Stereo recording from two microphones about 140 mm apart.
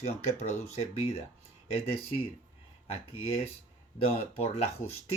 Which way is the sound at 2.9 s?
45° left (ahead or behind).